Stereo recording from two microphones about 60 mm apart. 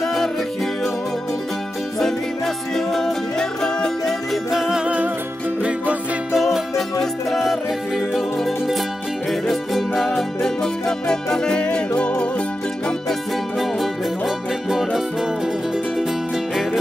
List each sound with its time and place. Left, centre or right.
0.0 s music: centre
2.0 s music: centre
4.5 s music: centre
4.8 s music: right
6.3 s music: centre; by 12.3 s left
13.6 s music: centre